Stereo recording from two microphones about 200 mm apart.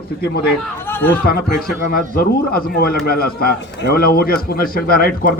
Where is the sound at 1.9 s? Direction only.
50° left (ahead or behind).